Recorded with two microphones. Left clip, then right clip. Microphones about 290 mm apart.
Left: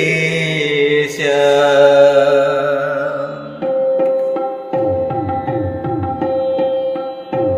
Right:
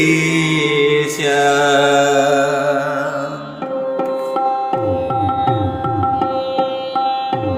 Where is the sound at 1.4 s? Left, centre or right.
Centre.